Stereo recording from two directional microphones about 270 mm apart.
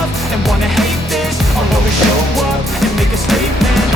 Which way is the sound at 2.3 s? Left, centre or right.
Centre.